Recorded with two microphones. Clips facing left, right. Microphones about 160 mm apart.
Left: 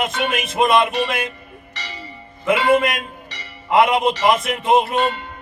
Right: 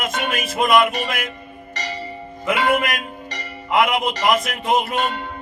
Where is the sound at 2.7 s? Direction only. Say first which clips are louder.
Left 4 dB; 25° left (ahead or behind).